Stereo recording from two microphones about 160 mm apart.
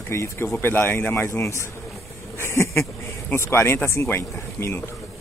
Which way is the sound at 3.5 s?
15° left (ahead or behind).